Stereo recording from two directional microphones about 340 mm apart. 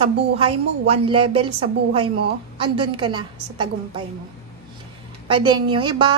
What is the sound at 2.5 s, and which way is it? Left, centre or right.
A woman's voice, centre.